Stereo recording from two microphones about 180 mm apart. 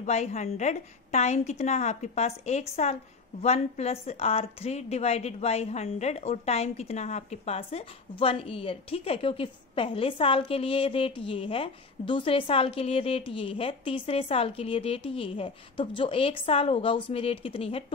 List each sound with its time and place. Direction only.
0.0 s a woman's voice: 40° left (ahead or behind)